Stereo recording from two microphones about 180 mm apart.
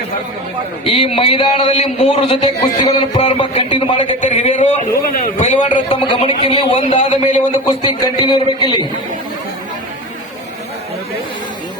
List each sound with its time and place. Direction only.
0.9 s speech: 30° left (ahead or behind)
5.9 s speech: 30° left (ahead or behind)
7.9 s a man's voice: 25° left (ahead or behind)